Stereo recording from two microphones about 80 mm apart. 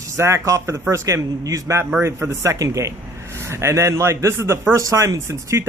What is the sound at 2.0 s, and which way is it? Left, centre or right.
Speech, right.